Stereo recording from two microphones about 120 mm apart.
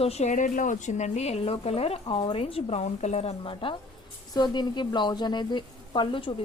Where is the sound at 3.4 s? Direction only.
45° left (ahead or behind).